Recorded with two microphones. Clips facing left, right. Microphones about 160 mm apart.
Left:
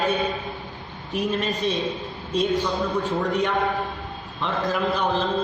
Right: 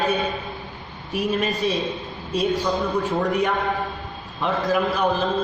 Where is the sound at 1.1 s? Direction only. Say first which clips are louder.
Right 2 dB; 5° right (ahead or behind).